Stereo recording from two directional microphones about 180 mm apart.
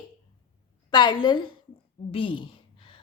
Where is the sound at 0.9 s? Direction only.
25° left (ahead or behind).